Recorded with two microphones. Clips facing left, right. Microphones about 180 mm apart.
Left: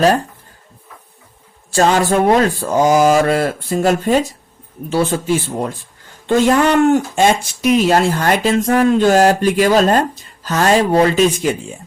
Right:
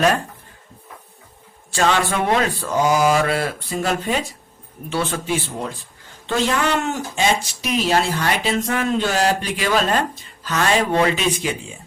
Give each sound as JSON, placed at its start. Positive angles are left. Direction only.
{"t": 1.7, "sound": "speech", "side_deg": 40}